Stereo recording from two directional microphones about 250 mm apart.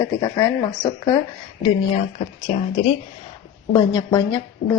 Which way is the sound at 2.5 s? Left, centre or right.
Left.